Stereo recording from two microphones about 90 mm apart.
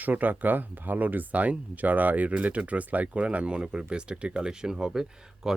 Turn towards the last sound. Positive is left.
turn(degrees=-5)  # may be behind; listen again after turning